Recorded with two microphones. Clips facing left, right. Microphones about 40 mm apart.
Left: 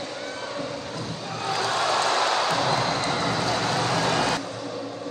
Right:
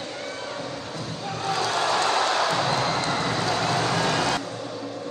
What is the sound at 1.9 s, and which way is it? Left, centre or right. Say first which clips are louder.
Music: even; right.